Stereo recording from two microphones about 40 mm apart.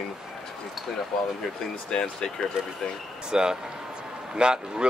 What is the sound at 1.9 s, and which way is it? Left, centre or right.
Speech, centre.